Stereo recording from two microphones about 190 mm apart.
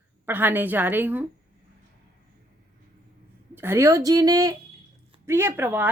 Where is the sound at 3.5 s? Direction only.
10° right (ahead or behind).